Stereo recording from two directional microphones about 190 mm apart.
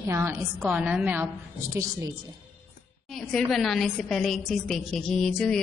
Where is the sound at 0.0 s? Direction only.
15° right (ahead or behind).